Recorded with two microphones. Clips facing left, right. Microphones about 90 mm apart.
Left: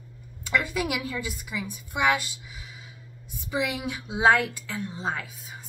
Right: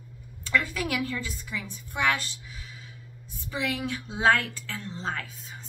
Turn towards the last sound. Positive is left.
turn(degrees=10)  # may be behind; listen again after turning